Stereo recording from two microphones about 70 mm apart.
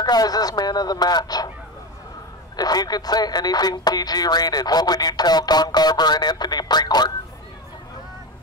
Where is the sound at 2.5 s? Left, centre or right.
Left.